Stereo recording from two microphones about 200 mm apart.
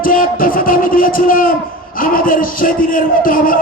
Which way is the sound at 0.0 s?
45° left (ahead or behind).